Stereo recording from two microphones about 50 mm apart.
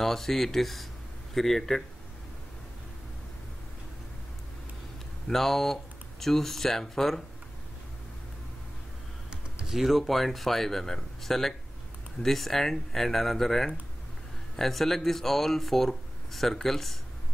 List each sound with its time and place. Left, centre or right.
0.0 s speech: centre
5.3 s speech: centre
9.3 s typing: centre
9.8 s speech: centre